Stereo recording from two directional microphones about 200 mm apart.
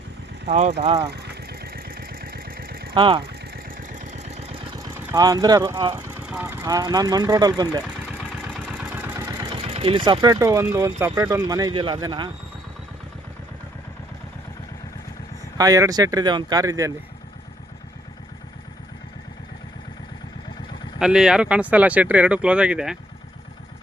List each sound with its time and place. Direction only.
0.4 s speech: 35° right (ahead or behind)
1.1 s vehicle: 55° right (ahead or behind)
2.9 s speech: 25° right (ahead or behind)
3.2 s engine: 45° right (ahead or behind)
4.8 s speech: 15° right (ahead or behind)
6.2 s speech: 10° right (ahead or behind)
8.5 s vehicle: 5° right (ahead or behind)
9.6 s speech: 30° right (ahead or behind)
15.5 s speech: 15° right (ahead or behind)
21.0 s speech: 5° right (ahead or behind)